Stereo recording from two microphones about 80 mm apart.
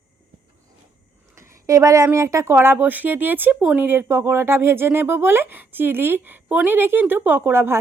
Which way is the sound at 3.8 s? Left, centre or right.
Right.